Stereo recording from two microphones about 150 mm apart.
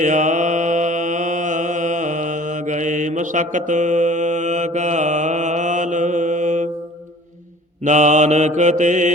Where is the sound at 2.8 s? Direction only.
55° right (ahead or behind).